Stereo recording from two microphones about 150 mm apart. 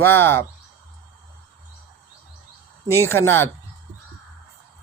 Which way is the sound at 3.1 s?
15° left (ahead or behind).